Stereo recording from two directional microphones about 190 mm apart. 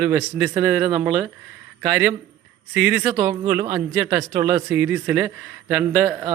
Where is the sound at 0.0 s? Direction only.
10° right (ahead or behind).